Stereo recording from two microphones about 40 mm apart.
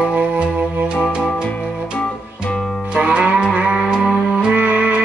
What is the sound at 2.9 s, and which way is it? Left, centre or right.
Music, right.